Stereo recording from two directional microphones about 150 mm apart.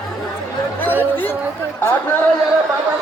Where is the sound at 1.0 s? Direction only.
15° left (ahead or behind).